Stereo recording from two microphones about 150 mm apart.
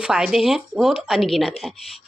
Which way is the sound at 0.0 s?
5° right (ahead or behind).